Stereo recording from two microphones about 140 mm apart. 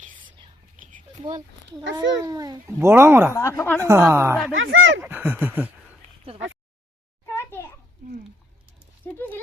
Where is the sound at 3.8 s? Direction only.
20° right (ahead or behind).